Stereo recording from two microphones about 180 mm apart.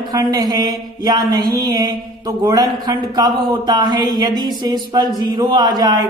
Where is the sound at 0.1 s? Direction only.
20° right (ahead or behind).